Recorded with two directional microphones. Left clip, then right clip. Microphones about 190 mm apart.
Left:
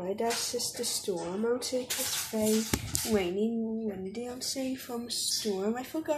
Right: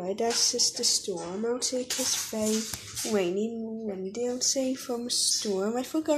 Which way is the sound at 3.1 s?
35° right (ahead or behind).